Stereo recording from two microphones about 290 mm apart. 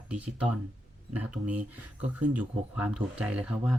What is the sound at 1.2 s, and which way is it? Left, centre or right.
Speech, right.